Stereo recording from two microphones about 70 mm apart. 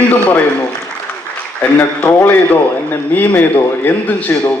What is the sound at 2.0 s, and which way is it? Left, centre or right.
A man's voice, left.